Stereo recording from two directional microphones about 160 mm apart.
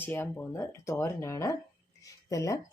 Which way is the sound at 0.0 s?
15° left (ahead or behind).